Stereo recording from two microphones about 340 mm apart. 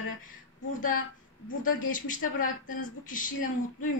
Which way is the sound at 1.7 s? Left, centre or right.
Left.